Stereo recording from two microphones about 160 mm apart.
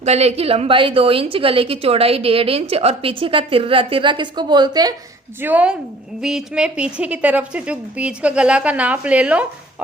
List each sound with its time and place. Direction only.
0.0 s a woman's voice: 40° right (ahead or behind); by 4.9 s 25° right (ahead or behind)
5.4 s a woman's voice: 10° right (ahead or behind)